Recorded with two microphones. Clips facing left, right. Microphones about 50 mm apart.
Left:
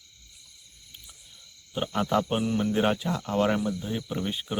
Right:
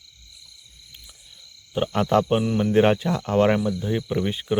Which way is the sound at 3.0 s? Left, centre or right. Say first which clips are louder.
Right 6 dB; right.